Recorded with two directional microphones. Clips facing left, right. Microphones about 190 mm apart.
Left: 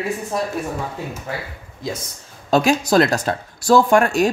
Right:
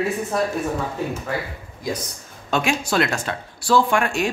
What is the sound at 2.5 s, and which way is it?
A woman's voice, 35° left (ahead or behind).